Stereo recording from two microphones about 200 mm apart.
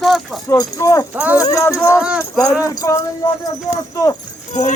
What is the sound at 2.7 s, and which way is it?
Jingle bell, 20° left (ahead or behind).